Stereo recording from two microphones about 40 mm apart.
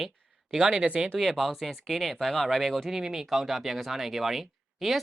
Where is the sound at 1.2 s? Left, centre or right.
Centre.